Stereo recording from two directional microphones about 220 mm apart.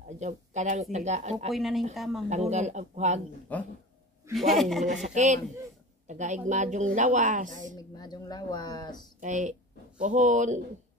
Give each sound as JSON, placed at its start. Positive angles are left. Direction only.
{"t": 0.2, "sound": "speech", "side_deg": -30}
{"t": 1.5, "sound": "a man's voice", "side_deg": 0}
{"t": 2.2, "sound": "speech", "side_deg": -30}
{"t": 3.5, "sound": "a man's voice", "side_deg": 5}
{"t": 4.8, "sound": "speech", "side_deg": -30}
{"t": 7.7, "sound": "speech", "side_deg": 20}
{"t": 9.2, "sound": "speech", "side_deg": -35}